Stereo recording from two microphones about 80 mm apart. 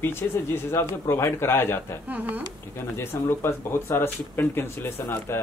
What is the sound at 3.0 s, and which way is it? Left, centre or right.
Speech, left.